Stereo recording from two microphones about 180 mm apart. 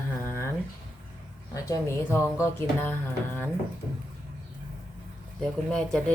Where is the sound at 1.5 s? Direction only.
15° left (ahead or behind).